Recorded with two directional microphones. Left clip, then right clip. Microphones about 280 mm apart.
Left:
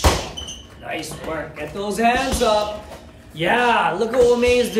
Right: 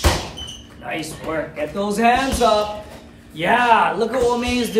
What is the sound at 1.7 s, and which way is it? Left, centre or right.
A man's voice, centre.